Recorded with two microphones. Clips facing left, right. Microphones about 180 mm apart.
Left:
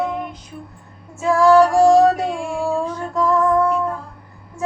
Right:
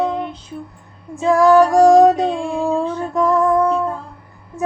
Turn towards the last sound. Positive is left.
turn(degrees=-15)  # may be behind; listen again after turning